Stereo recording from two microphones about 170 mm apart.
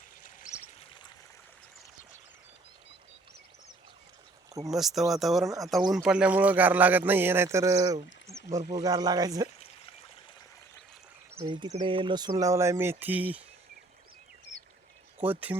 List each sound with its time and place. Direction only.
0.2 s a sound: 45° left (ahead or behind)
4.7 s speech: centre (ahead or behind); by 7.9 s 20° right (ahead or behind)
8.3 s a sound: 15° right (ahead or behind)
8.7 s speech: 20° right (ahead or behind)
11.3 s speech: 30° right (ahead or behind); by 13.4 s 10° right (ahead or behind)
15.2 s speech: 10° right (ahead or behind)